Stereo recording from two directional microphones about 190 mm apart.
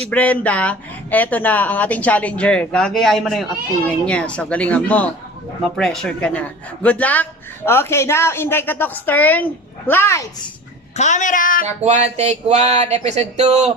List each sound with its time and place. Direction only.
0.1 s a man's voice: 10° left (ahead or behind)
10.9 s a woman's voice: 40° left (ahead or behind)
11.6 s speech: 35° right (ahead or behind)